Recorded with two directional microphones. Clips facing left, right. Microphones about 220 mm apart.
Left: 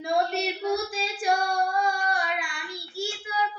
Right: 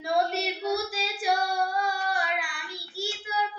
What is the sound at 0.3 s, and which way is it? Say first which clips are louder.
Child singing: left 2 dB; 5° right (ahead or behind).